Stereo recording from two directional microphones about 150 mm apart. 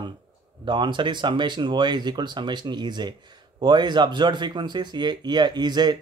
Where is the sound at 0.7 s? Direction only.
30° right (ahead or behind).